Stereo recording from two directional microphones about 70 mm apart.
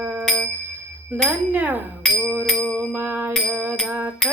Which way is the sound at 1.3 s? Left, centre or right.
Right.